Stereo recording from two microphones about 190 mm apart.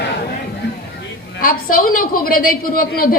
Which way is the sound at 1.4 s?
50° left (ahead or behind).